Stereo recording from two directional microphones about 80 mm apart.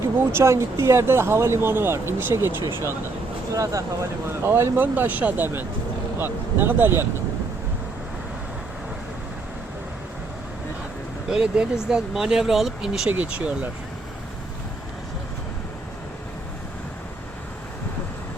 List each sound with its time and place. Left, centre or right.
0.3 s speech: right
2.6 s speech: left
3.5 s speech: right
4.3 s speech: right
11.3 s speech: centre